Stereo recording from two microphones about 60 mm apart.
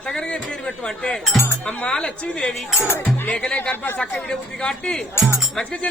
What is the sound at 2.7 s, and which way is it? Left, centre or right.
Speech, left.